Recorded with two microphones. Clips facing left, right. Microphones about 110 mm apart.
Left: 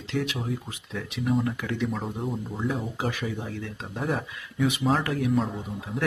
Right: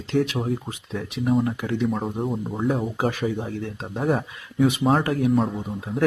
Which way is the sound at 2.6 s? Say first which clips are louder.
Right 7 dB; 45° right (ahead or behind).